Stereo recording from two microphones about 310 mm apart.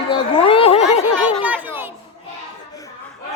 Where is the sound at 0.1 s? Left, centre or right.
Centre.